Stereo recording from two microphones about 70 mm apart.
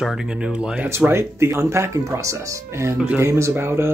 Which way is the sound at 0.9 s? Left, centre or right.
Right.